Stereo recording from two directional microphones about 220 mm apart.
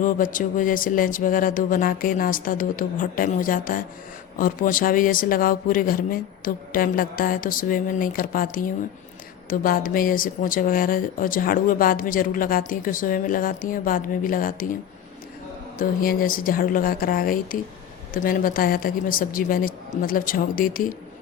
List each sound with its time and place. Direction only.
0.0 s speech: 35° left (ahead or behind)
15.8 s speech: 40° left (ahead or behind)